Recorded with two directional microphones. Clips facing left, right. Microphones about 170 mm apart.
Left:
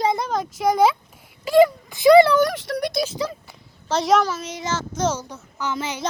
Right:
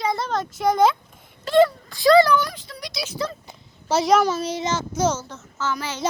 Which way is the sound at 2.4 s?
75° left (ahead or behind).